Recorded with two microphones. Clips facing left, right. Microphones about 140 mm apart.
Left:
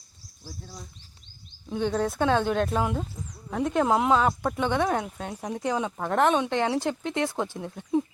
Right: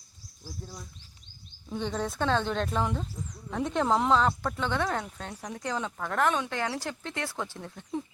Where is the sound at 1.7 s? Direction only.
5° left (ahead or behind).